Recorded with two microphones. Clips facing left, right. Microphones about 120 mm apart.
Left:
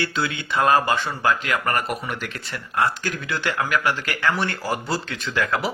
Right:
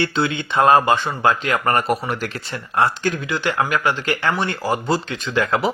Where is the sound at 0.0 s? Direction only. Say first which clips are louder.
Right 5 dB; 25° right (ahead or behind).